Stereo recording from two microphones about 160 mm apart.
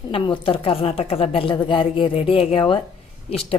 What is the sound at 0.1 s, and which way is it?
A woman's voice, 35° left (ahead or behind).